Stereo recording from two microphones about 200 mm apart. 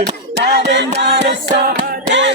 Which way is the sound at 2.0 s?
60° right (ahead or behind).